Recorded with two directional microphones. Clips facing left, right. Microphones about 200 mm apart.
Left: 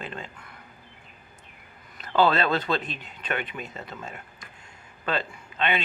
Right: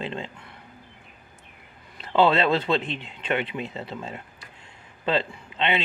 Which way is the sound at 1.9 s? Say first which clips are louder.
Right 2 dB; 25° right (ahead or behind).